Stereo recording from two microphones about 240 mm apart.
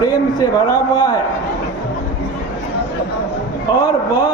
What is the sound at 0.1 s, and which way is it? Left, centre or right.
A man's voice, centre.